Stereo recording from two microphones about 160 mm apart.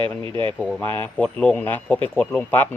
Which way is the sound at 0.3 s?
30° right (ahead or behind).